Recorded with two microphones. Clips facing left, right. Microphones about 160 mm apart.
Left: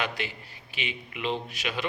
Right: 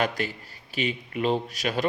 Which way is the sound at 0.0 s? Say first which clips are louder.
Right 5 dB; 40° right (ahead or behind).